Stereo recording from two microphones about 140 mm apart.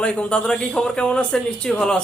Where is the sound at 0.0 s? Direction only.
10° left (ahead or behind).